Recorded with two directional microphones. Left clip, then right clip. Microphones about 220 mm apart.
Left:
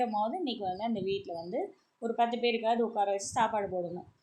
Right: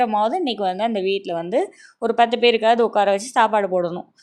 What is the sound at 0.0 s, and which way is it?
A woman's voice, 40° right (ahead or behind).